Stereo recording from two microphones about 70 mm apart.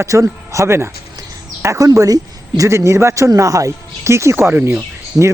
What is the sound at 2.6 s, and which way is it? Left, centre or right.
Speech, right.